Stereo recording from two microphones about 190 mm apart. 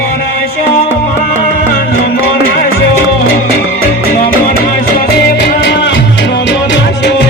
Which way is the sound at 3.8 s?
50° left (ahead or behind).